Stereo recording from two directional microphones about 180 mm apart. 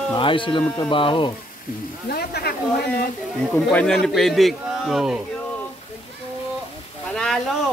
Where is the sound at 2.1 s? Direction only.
60° left (ahead or behind).